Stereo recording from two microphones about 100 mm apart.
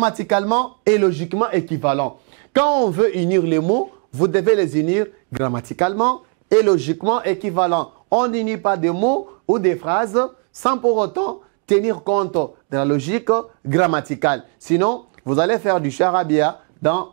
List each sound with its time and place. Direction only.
0.0 s speech: 25° right (ahead or behind)